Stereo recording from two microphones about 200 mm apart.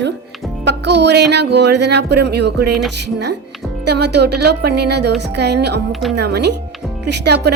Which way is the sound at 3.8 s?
55° right (ahead or behind).